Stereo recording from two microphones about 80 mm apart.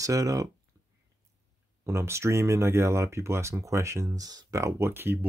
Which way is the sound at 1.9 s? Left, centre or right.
Right.